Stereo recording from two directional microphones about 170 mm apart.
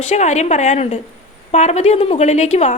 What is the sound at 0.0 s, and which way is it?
A woman's voice, 40° left (ahead or behind).